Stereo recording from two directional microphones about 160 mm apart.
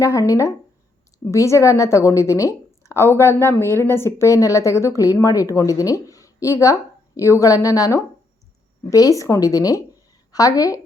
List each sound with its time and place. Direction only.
0.0 s a woman's voice: 20° left (ahead or behind)